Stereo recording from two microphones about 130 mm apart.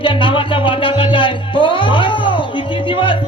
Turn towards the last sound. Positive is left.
turn(degrees=40)  # may be behind; listen again after turning